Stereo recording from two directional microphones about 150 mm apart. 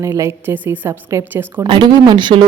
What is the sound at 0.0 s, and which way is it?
A woman's voice, 20° right (ahead or behind).